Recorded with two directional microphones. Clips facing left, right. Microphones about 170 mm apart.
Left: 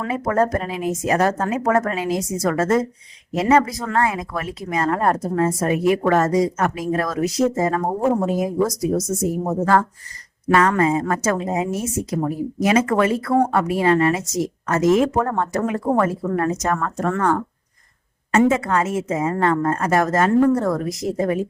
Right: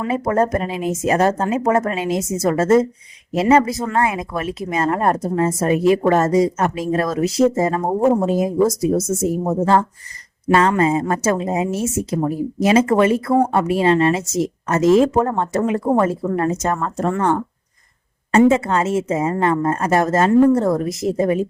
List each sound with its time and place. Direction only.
0.1 s a woman's voice: 25° right (ahead or behind)